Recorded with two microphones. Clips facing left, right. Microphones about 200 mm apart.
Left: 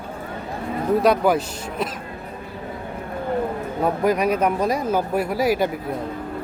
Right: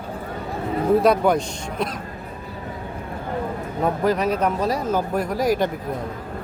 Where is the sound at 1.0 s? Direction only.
5° left (ahead or behind).